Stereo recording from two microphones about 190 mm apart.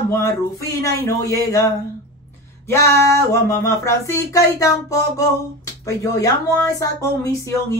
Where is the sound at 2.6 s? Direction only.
15° left (ahead or behind).